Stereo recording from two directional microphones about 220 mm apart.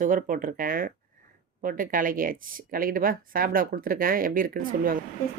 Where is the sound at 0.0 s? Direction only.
40° right (ahead or behind).